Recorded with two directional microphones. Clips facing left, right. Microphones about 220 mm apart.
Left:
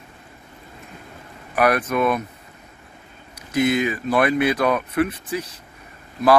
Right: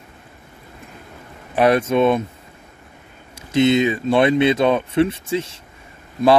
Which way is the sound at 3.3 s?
25° right (ahead or behind).